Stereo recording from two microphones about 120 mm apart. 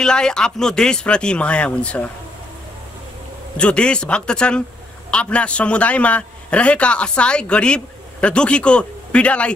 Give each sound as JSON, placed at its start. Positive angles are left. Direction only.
{"t": 0.0, "sound": "a man's voice", "side_deg": 5}
{"t": 3.5, "sound": "a man's voice", "side_deg": 10}